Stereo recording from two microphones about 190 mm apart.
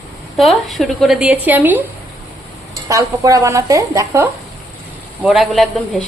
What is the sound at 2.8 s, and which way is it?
Speech, 15° right (ahead or behind).